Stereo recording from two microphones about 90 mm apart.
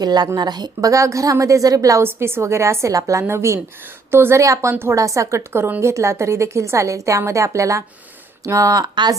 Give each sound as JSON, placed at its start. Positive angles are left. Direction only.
{"t": 0.0, "sound": "a woman's voice", "side_deg": -50}
{"t": 2.0, "sound": "a woman's voice", "side_deg": -25}
{"t": 4.9, "sound": "a woman's voice", "side_deg": -35}